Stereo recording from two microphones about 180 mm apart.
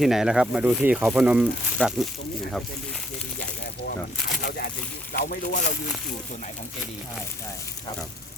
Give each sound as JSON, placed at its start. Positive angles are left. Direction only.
{"t": 0.0, "sound": "speech", "side_deg": 0}
{"t": 4.4, "sound": "speech", "side_deg": 60}